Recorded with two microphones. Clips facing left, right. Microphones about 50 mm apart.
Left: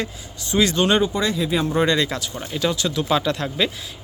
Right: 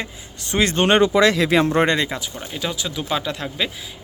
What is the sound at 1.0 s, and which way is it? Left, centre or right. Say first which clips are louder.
Speech: right 6 dB; right.